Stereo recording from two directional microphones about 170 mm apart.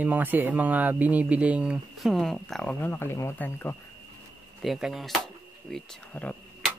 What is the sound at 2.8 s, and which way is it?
Speech, 15° left (ahead or behind).